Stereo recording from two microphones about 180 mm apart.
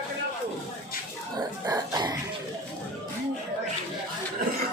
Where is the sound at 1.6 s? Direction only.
20° right (ahead or behind).